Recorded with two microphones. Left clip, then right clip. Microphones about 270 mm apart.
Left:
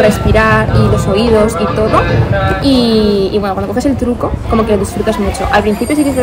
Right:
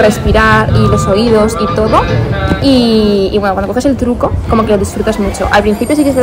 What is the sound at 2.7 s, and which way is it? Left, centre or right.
Speech, centre.